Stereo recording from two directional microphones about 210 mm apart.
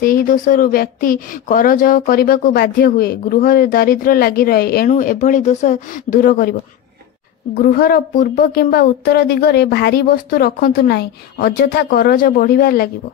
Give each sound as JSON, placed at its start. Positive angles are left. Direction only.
{"t": 0.0, "sound": "speech", "side_deg": 40}
{"t": 7.5, "sound": "speech", "side_deg": 45}